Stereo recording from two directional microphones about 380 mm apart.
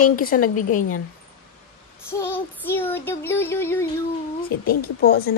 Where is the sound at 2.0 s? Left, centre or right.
Centre.